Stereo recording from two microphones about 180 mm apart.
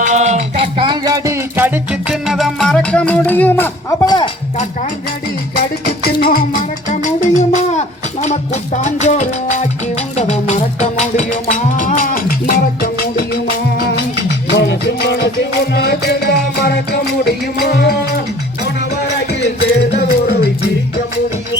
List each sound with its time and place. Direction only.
0.0 s music: 40° right (ahead or behind); by 3.9 s 10° left (ahead or behind)
4.0 s speech: 25° left (ahead or behind)
6.0 s music: 55° left (ahead or behind)
20.0 s music: 65° left (ahead or behind)